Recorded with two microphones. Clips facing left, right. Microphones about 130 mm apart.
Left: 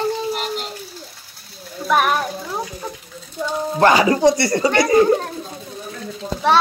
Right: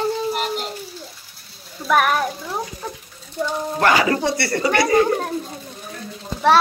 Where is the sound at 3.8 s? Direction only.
25° left (ahead or behind).